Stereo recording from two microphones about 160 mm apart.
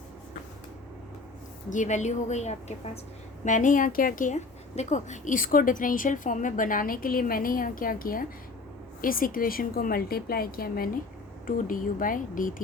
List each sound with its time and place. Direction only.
1.7 s a woman's voice: 50° left (ahead or behind)
3.4 s a woman's voice: 55° left (ahead or behind)